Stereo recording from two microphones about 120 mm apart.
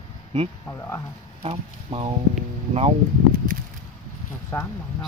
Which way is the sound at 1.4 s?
55° right (ahead or behind).